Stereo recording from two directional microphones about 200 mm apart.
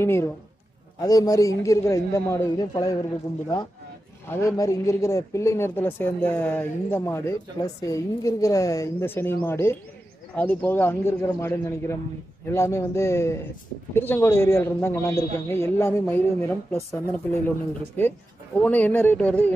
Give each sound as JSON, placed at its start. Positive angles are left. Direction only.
{"t": 0.0, "sound": "speech", "side_deg": 10}
{"t": 4.3, "sound": "speech", "side_deg": 15}
{"t": 18.6, "sound": "speech", "side_deg": 10}